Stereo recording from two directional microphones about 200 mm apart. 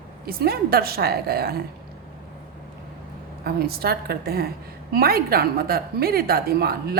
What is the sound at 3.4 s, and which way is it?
A woman's voice, 50° right (ahead or behind).